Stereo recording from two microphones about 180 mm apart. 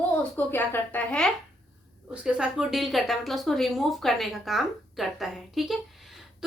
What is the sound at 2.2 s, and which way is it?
Speech, 5° right (ahead or behind).